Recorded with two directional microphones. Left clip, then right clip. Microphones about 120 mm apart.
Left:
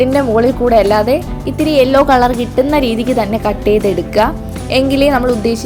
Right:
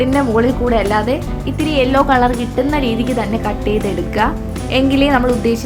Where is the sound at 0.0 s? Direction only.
30° left (ahead or behind).